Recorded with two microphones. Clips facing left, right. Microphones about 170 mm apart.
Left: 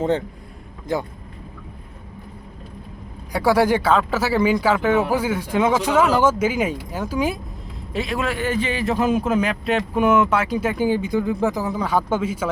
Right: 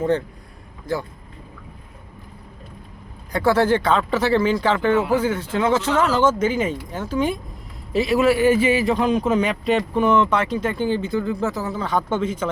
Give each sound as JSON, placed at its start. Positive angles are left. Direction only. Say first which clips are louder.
{"t": 0.9, "sound": "speech", "louder": "left 1 dB", "side_deg": 20}
{"t": 3.3, "sound": "a man's voice", "louder": "even", "side_deg": 10}
{"t": 7.9, "sound": "a man's voice", "louder": "right 7 dB", "side_deg": -5}